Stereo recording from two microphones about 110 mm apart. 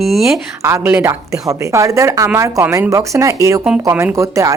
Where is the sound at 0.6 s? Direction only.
20° right (ahead or behind).